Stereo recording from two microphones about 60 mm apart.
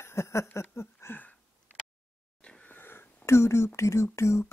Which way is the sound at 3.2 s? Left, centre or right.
Left.